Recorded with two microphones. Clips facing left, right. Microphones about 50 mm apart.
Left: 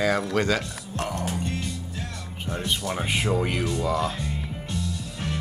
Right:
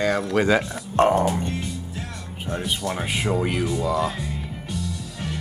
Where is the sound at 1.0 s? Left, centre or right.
Right.